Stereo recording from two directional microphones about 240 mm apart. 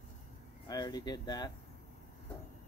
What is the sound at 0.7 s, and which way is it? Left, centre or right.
Speech, centre.